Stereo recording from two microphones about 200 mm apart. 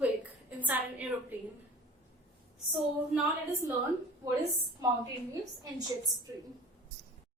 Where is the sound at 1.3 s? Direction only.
10° right (ahead or behind).